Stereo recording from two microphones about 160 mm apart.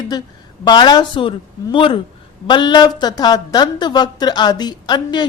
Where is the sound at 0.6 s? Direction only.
25° left (ahead or behind).